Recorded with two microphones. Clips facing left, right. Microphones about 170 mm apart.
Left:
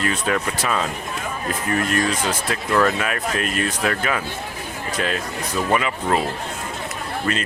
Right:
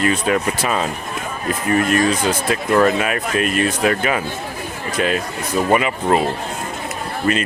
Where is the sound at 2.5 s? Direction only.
15° right (ahead or behind).